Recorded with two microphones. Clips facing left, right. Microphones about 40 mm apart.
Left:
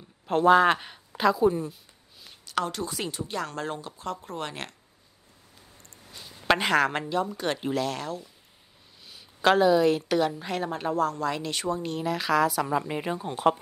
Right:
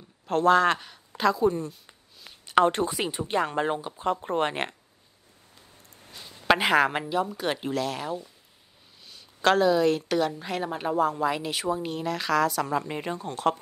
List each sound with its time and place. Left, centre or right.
0.3 s a man's voice: centre
1.1 s a woman's voice: centre
2.4 s a sound: right
2.9 s speech: right
6.1 s a woman's voice: centre
9.0 s a woman's voice: centre